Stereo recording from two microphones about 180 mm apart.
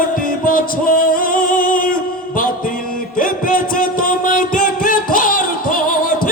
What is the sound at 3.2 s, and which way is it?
Music, 50° left (ahead or behind).